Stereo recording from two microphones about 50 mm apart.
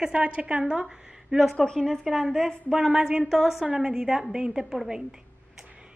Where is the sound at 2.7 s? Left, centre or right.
Centre.